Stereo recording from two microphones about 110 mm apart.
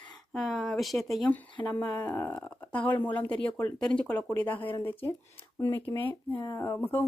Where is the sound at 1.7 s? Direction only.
20° left (ahead or behind).